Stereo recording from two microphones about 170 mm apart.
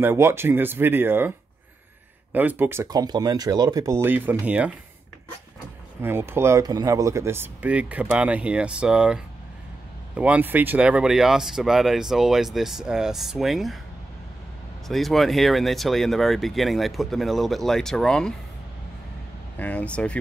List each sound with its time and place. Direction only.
0.0 s speech: 15° right (ahead or behind)
2.3 s speech: 10° right (ahead or behind)
6.0 s speech: 15° right (ahead or behind)
14.9 s speech: centre (ahead or behind)
19.6 s speech: 10° left (ahead or behind)